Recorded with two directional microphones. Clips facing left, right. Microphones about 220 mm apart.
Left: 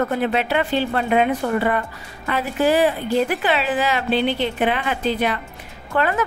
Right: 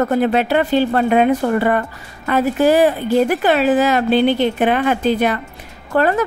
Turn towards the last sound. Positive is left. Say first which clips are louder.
# right 5 dB
turn(degrees=-40)  # may be behind; listen again after turning